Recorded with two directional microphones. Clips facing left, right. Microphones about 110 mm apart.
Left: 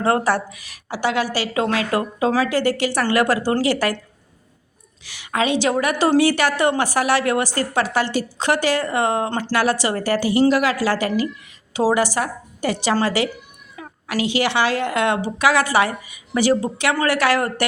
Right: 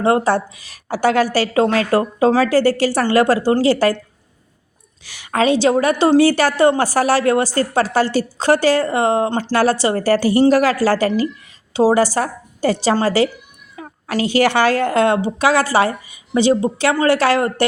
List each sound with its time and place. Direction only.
0.0 s speech: 25° right (ahead or behind)
0.9 s a woman's voice: 45° right (ahead or behind)
5.0 s a woman's voice: 45° right (ahead or behind); by 17.7 s 30° right (ahead or behind)